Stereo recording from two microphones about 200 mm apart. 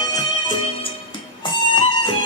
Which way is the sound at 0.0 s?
20° left (ahead or behind).